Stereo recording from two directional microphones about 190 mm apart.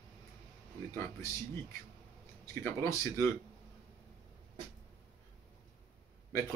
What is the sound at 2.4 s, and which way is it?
Speech, 15° left (ahead or behind).